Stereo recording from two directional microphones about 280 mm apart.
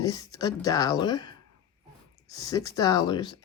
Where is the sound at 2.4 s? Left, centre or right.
Centre.